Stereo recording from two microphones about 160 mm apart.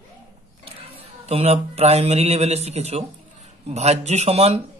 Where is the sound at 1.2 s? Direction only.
40° right (ahead or behind).